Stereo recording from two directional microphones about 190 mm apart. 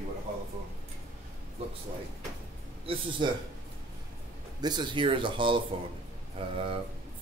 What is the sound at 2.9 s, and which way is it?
Speech, 30° right (ahead or behind).